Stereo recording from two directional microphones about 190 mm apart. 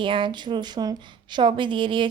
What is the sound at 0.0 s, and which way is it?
Speech, 25° right (ahead or behind).